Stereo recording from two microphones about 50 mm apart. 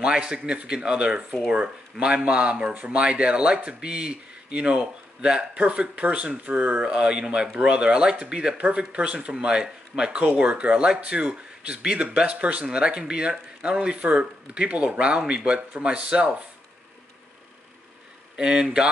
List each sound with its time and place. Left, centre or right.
0.0 s speech: centre
18.3 s speech: centre